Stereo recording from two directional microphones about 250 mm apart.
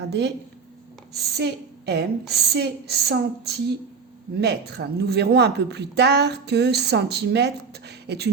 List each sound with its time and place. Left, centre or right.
0.1 s speech: right